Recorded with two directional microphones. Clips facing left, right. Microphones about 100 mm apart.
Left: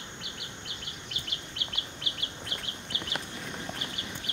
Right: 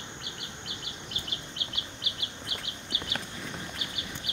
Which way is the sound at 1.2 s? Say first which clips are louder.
Right 1 dB; 25° right (ahead or behind).